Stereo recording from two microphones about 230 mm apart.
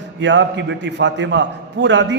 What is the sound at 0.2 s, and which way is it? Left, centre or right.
A man's voice, right.